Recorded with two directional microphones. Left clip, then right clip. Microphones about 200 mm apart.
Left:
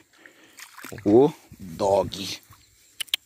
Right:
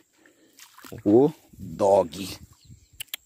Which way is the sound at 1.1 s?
30° right (ahead or behind).